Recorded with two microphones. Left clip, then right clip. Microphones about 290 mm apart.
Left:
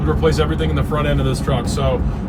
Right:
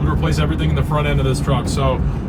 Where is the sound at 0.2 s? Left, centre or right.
Centre.